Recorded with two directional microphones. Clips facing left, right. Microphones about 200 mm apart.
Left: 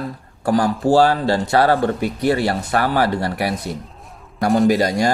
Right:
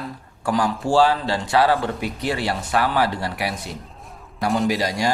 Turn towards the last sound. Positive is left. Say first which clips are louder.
# left 6 dB
turn(degrees=50)  # may be behind; listen again after turning